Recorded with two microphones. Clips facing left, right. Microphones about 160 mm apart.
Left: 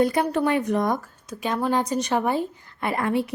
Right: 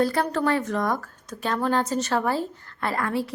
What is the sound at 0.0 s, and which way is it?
A woman's voice, 15° left (ahead or behind).